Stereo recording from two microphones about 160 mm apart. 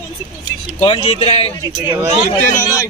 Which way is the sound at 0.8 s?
35° left (ahead or behind).